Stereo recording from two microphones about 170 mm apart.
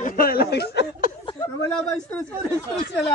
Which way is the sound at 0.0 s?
55° left (ahead or behind).